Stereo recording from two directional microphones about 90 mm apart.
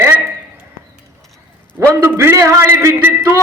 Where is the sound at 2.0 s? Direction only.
30° right (ahead or behind).